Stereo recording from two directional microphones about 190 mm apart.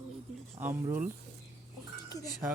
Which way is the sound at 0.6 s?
10° right (ahead or behind).